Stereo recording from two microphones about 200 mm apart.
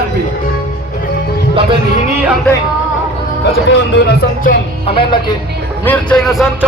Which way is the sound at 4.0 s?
50° left (ahead or behind).